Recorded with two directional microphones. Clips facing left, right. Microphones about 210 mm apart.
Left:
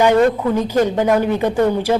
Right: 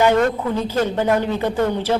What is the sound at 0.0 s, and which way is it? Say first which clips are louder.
Speech: left 3 dB; 15° left (ahead or behind).